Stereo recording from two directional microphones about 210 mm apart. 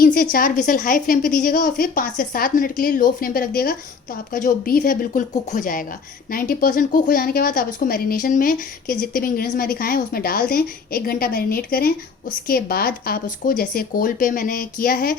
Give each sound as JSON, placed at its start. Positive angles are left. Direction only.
{"t": 0.0, "sound": "a woman's voice", "side_deg": 40}